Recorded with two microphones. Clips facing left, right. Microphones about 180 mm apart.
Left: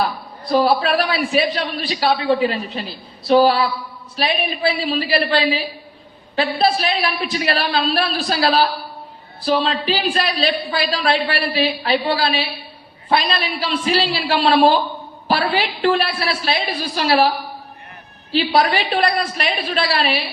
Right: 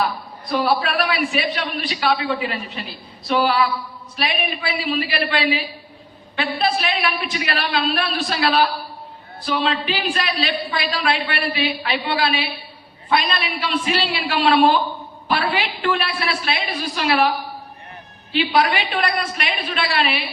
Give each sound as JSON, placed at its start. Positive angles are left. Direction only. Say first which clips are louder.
{"t": 0.4, "sound": "a woman's voice", "louder": "left 4 dB", "side_deg": 35}